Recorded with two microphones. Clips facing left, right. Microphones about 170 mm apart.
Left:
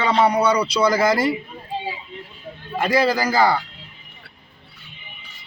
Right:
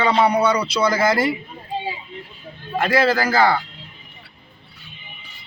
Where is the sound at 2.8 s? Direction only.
15° left (ahead or behind).